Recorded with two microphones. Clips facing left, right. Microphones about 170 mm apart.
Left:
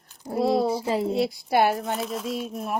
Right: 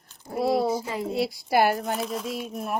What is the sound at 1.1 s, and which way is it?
Speech, centre (ahead or behind).